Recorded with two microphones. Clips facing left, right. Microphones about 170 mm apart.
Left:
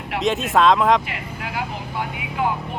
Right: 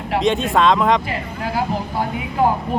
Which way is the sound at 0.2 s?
Centre (ahead or behind).